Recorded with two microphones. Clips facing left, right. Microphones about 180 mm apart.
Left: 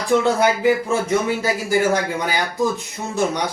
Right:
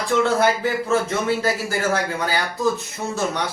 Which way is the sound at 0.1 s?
15° left (ahead or behind).